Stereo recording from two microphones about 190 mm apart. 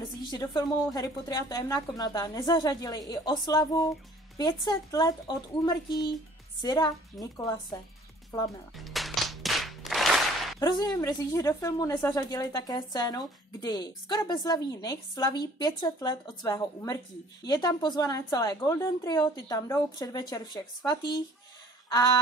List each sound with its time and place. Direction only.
0.3 s speech: 20° left (ahead or behind)
8.7 s a sound: centre (ahead or behind)
10.6 s speech: 20° left (ahead or behind)